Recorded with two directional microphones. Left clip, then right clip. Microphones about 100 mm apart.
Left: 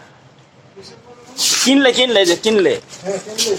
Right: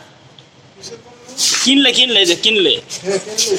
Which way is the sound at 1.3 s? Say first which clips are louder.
Right 1 dB; 30° left (ahead or behind).